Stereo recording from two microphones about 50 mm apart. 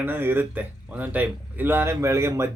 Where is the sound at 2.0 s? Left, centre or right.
Right.